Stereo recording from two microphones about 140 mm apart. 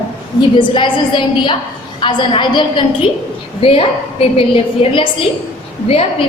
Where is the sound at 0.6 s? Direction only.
35° left (ahead or behind).